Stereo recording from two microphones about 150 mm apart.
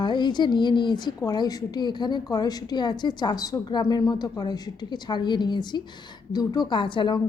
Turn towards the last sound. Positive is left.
turn(degrees=35)  # may be behind; listen again after turning